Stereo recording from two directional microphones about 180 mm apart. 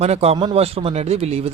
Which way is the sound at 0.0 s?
35° right (ahead or behind).